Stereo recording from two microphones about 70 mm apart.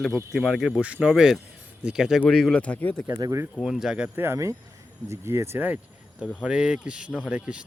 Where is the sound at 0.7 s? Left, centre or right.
Centre.